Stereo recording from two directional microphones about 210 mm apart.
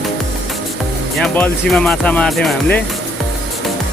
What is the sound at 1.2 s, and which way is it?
Speech, 5° left (ahead or behind).